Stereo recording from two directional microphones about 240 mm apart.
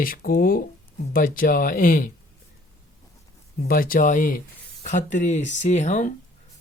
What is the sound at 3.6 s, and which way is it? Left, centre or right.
Speech, left.